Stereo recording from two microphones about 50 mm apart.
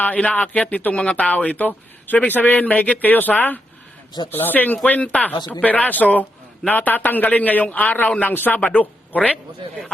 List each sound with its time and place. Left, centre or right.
0.0 s speech: left